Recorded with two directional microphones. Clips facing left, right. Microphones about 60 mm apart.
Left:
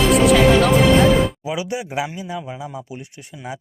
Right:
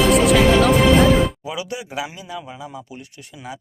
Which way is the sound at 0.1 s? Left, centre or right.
Centre.